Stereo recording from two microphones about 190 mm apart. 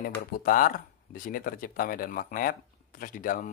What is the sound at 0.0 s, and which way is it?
Speech, 50° left (ahead or behind).